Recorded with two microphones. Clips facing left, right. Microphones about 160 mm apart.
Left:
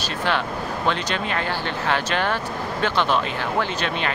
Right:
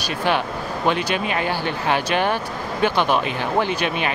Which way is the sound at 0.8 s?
15° right (ahead or behind).